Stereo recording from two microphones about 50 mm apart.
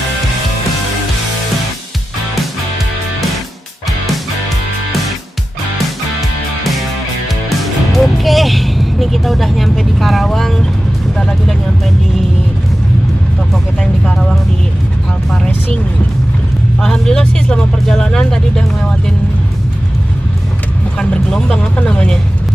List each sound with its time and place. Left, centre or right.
7.4 s music: centre
11.1 s speech: centre
14.0 s speech: centre
16.8 s speech: centre
21.0 s speech: centre